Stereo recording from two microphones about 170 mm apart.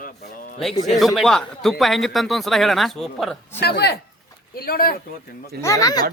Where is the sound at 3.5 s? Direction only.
75° left (ahead or behind).